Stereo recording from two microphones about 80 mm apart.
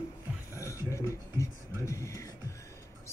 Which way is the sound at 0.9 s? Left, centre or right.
Left.